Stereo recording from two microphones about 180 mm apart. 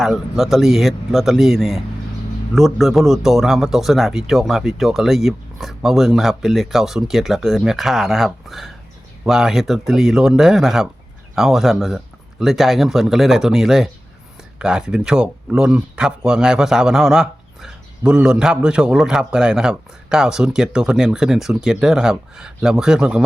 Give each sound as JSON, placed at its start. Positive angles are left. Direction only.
{"t": 0.0, "sound": "speech", "side_deg": 0}